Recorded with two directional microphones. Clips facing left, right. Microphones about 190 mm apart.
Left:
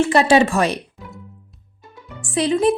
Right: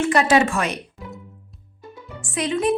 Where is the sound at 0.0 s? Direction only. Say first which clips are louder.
Left 3 dB; 30° left (ahead or behind).